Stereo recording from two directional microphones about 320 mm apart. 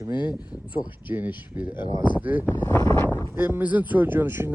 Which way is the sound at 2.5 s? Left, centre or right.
Centre.